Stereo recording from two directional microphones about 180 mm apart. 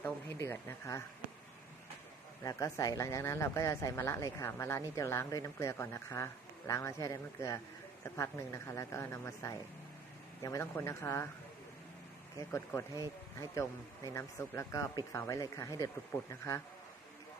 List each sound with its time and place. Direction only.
0.0 s speech: 15° left (ahead or behind)
2.4 s speech: 20° left (ahead or behind)
12.5 s speech: 15° left (ahead or behind)